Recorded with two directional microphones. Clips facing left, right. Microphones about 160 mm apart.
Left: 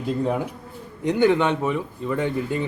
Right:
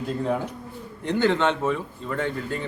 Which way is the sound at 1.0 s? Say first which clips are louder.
Left 3 dB; 15° left (ahead or behind).